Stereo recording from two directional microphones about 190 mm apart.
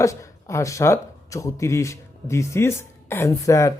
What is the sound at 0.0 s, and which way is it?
Speech, 15° left (ahead or behind).